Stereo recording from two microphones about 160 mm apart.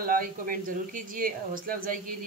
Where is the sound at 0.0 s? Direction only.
60° right (ahead or behind).